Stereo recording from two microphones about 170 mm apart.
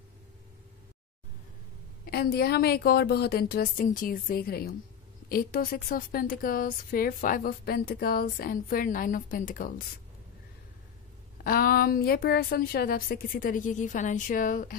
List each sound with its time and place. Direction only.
2.0 s a woman's voice: 65° left (ahead or behind)
11.4 s a woman's voice: 60° left (ahead or behind)